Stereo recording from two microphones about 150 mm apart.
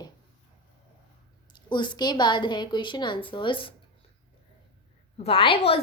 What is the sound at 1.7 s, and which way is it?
A woman's voice, 30° left (ahead or behind).